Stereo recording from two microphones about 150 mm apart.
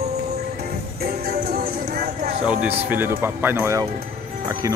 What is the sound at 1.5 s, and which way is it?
Clip-clop, 90° right.